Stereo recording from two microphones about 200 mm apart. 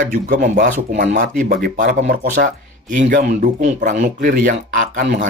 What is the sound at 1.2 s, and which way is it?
Speech, 50° right (ahead or behind).